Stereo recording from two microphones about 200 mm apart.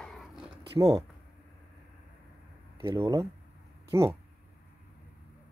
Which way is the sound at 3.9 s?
15° right (ahead or behind).